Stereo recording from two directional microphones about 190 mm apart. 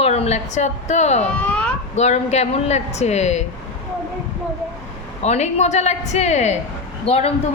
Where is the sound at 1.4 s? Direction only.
5° left (ahead or behind).